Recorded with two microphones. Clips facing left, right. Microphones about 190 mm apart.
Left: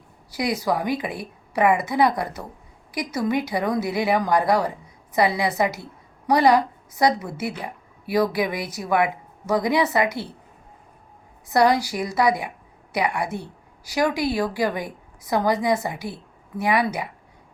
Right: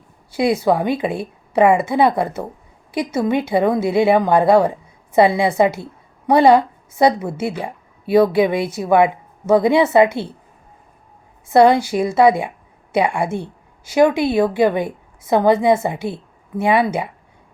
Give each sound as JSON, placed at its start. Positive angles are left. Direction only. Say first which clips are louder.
{"t": 0.3, "sound": "speech", "louder": "right 7 dB", "side_deg": -25}
{"t": 11.4, "sound": "a woman's voice", "louder": "right 6 dB", "side_deg": -25}